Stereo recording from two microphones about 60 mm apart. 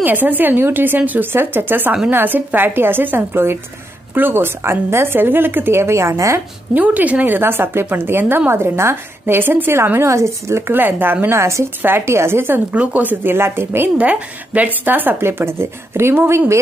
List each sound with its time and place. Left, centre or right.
0.0 s speech: right
6.7 s speech: right
7.3 s speech: right
9.9 s a woman's voice: right
10.7 s speech: right
11.3 s a woman's voice: right
12.7 s speech: right
13.9 s speech: right